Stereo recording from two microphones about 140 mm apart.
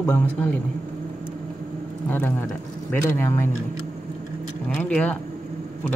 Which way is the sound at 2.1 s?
15° left (ahead or behind).